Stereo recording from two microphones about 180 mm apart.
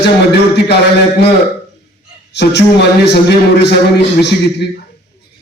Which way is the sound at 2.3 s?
70° left (ahead or behind).